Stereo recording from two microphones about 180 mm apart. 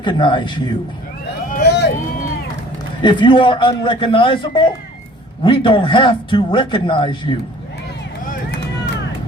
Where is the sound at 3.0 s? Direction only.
25° left (ahead or behind).